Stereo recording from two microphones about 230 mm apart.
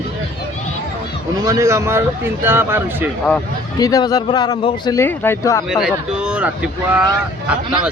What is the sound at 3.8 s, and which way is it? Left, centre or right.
Speech, centre.